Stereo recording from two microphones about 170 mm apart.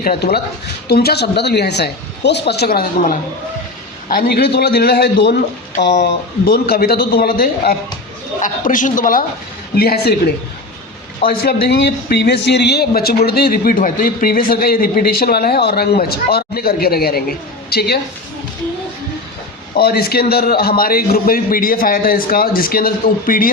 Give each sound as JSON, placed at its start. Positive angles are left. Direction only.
{"t": 0.0, "sound": "a woman's voice", "side_deg": 60}
{"t": 8.4, "sound": "a man's voice", "side_deg": 50}
{"t": 9.7, "sound": "a woman's voice", "side_deg": 70}
{"t": 11.3, "sound": "speech", "side_deg": 60}
{"t": 19.7, "sound": "speech", "side_deg": 65}